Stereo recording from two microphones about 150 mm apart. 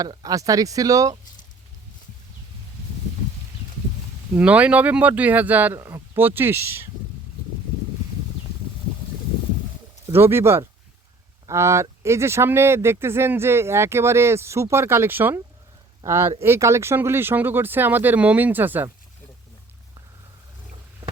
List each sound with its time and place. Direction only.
0.0 s speech: 25° right (ahead or behind)
4.4 s speech: 10° right (ahead or behind)
10.1 s speech: 15° right (ahead or behind)